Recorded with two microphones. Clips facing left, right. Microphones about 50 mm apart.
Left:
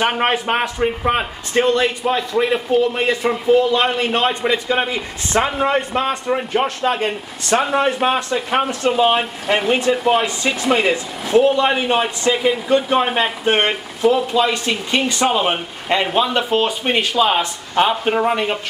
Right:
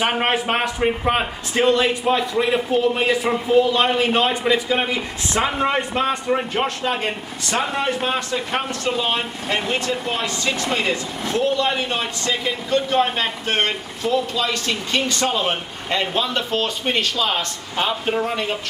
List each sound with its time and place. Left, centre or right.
0.3 s speech: centre
8.0 s speech: centre